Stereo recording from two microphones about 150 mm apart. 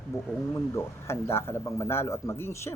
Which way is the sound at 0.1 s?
20° left (ahead or behind).